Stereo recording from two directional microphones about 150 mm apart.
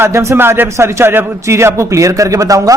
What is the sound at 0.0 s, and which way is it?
A man's voice, 20° right (ahead or behind).